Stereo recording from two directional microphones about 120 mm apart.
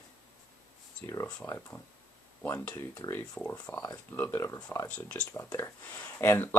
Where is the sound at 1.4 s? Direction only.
5° left (ahead or behind).